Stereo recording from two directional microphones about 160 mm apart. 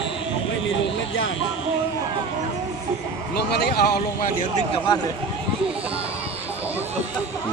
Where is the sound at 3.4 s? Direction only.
90° left.